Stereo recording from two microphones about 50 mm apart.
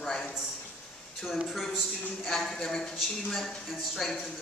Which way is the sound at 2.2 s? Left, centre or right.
Centre.